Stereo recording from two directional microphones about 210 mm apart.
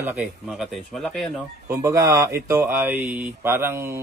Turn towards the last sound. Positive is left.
turn(degrees=-10)  # may be behind; listen again after turning